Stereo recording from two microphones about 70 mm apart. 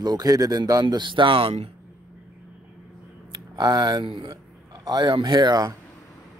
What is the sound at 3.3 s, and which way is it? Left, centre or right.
Speech, right.